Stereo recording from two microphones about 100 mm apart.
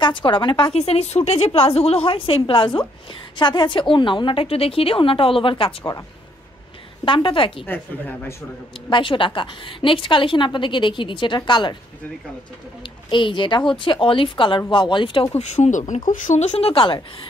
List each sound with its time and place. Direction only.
0.0 s a woman's voice: 55° left (ahead or behind)
7.1 s a woman's voice: 60° left (ahead or behind)
7.6 s a man's voice: 20° left (ahead or behind)
8.9 s a woman's voice: 60° left (ahead or behind)
13.1 s a woman's voice: 55° left (ahead or behind)
15.6 s speech: 45° left (ahead or behind)
16.3 s speech: 75° left (ahead or behind)